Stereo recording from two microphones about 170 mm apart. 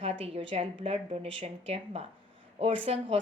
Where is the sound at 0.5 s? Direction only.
35° right (ahead or behind).